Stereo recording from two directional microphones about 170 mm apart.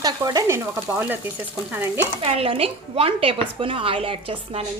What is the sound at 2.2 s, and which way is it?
A woman's voice, 35° right (ahead or behind).